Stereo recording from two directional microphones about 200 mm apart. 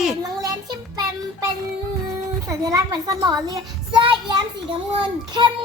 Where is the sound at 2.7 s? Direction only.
20° right (ahead or behind).